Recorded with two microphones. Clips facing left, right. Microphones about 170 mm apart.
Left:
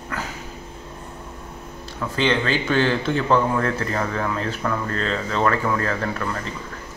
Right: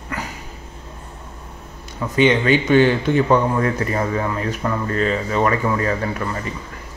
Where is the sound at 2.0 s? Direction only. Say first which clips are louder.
Right 5 dB; 15° right (ahead or behind).